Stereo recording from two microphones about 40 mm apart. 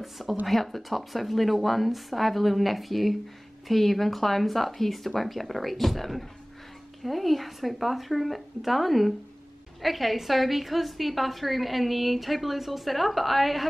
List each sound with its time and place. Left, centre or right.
0.0 s a woman's voice: centre